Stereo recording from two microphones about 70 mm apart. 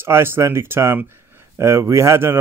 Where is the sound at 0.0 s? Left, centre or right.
Right.